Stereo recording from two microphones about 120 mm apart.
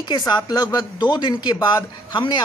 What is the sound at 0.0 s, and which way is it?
Speech, 35° left (ahead or behind).